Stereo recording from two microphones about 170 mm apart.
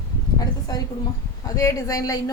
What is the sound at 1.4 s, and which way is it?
Speech, 20° left (ahead or behind).